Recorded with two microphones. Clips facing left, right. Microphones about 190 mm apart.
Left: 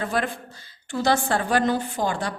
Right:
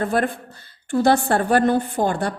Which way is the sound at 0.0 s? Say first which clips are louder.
Right 5 dB; 50° right (ahead or behind).